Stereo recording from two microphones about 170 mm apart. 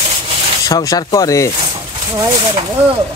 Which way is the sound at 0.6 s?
20° left (ahead or behind).